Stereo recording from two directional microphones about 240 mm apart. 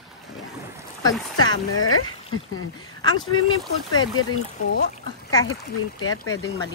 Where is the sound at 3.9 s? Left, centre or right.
Left.